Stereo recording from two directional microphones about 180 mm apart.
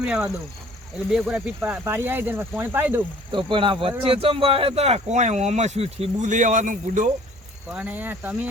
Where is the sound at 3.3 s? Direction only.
25° right (ahead or behind); by 7.1 s 45° right (ahead or behind).